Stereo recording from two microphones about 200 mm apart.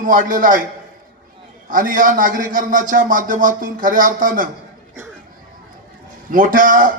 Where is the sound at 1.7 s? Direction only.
40° right (ahead or behind).